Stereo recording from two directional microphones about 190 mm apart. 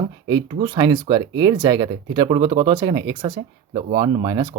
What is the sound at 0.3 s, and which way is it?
Speech, 25° right (ahead or behind).